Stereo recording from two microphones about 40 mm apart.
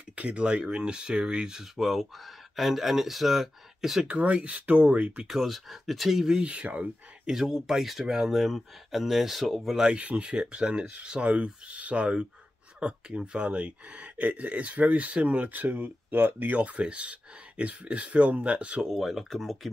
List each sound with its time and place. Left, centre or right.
0.1 s speech: right
1.6 s speech: centre
4.2 s speech: right
5.2 s speech: centre
6.4 s speech: right; by 9.8 s centre
9.8 s speech: right
16.1 s speech: right
16.5 s speech: right
18.9 s speech: centre